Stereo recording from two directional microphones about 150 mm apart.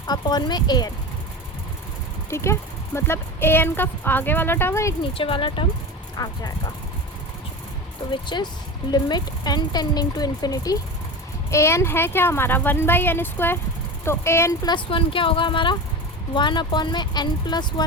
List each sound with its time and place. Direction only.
0.1 s speech: 30° left (ahead or behind)
2.3 s speech: 20° left (ahead or behind)
5.1 s speech: 35° left (ahead or behind)
8.1 s speech: 30° left (ahead or behind)
14.7 s speech: 35° left (ahead or behind)